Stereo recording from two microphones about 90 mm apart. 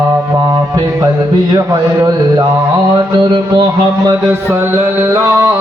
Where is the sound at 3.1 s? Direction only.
60° right (ahead or behind).